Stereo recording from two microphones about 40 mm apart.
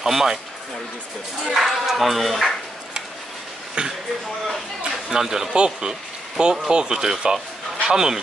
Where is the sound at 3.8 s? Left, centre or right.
Right.